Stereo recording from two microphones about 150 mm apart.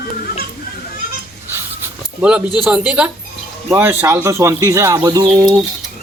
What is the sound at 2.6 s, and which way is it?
Speech, 5° right (ahead or behind).